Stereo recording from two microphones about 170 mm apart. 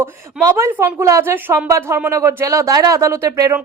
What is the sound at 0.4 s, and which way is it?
Speech, 15° right (ahead or behind).